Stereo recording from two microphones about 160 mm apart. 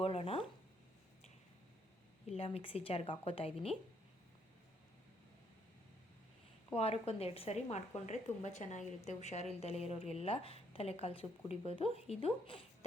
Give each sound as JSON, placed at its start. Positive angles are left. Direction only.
{"t": 0.0, "sound": "speech", "side_deg": 35}
{"t": 2.2, "sound": "a woman's voice", "side_deg": 40}
{"t": 6.7, "sound": "a woman's voice", "side_deg": 40}